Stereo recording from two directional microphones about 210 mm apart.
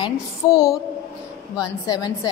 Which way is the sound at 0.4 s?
20° left (ahead or behind).